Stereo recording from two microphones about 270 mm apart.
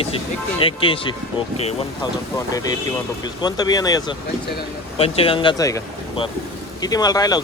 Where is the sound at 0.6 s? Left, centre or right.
Centre.